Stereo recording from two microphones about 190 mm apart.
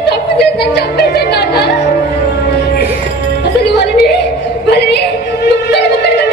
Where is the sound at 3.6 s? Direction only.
60° left (ahead or behind).